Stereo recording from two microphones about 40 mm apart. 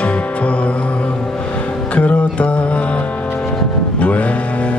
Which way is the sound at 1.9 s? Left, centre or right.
Left.